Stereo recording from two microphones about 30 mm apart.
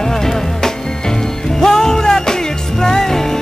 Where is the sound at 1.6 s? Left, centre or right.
Centre.